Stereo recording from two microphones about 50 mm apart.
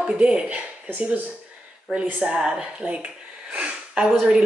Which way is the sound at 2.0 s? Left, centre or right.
Centre.